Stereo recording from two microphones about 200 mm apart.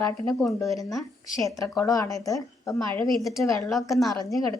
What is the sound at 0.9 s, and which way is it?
A woman's voice, 15° left (ahead or behind).